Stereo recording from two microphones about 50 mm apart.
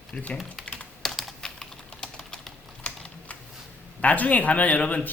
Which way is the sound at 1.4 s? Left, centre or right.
Centre.